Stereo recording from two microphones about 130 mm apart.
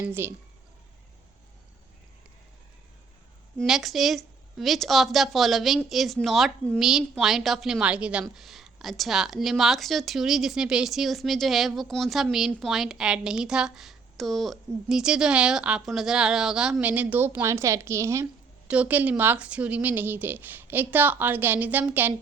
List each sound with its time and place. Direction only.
0.0 s speech: 20° right (ahead or behind)
3.7 s a woman's voice: centre (ahead or behind); by 18.3 s 20° right (ahead or behind)
18.7 s speech: 10° right (ahead or behind)